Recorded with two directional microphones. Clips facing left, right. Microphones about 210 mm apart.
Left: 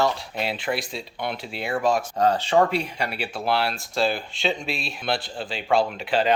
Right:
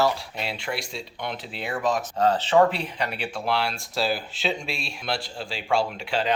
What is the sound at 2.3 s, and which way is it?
Speech, 10° left (ahead or behind).